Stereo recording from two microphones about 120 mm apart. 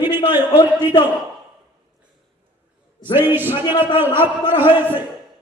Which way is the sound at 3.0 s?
15° right (ahead or behind).